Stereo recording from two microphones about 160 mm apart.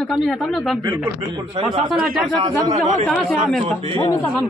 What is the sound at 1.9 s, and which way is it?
A man's voice, centre (ahead or behind).